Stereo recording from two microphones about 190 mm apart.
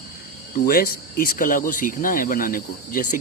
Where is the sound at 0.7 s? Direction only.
50° left (ahead or behind).